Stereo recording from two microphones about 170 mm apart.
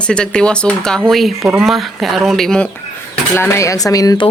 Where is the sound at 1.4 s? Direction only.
10° right (ahead or behind).